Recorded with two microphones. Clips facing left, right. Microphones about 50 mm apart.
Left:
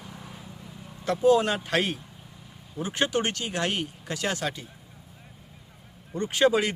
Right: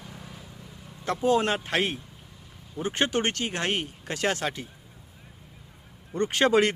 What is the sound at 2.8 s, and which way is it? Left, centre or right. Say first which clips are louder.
Speech: even; right.